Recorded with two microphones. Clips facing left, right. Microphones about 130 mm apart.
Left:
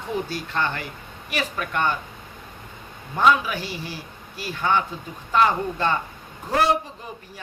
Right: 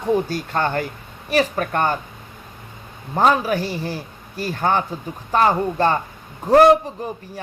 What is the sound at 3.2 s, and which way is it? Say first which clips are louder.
Speech: right 3 dB; 40° right (ahead or behind).